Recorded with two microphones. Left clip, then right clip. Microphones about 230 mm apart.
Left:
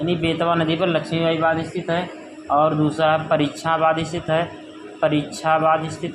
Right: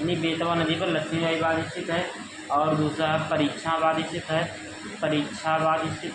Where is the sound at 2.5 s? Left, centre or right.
Left.